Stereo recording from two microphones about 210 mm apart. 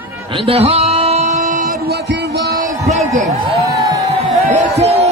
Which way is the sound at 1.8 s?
50° right (ahead or behind).